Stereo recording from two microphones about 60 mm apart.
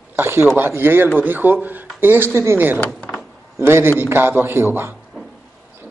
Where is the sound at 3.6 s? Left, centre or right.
Right.